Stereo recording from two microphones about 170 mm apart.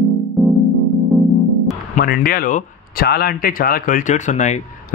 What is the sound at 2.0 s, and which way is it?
Speech, 60° left (ahead or behind).